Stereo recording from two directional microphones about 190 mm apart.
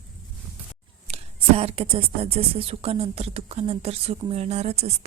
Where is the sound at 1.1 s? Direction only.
30° right (ahead or behind).